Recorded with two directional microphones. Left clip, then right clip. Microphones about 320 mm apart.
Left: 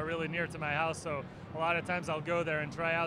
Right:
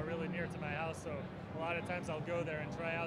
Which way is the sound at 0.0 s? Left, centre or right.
Left.